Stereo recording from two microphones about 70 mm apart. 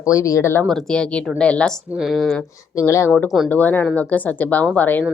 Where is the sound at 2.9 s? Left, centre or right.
Left.